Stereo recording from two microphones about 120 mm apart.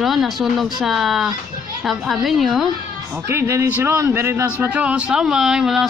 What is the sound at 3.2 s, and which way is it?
A man's voice, 20° right (ahead or behind).